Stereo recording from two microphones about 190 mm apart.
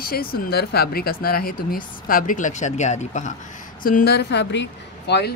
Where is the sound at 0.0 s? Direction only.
50° left (ahead or behind).